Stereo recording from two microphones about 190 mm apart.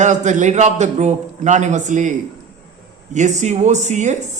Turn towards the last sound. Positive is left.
turn(degrees=-40)  # may be behind; listen again after turning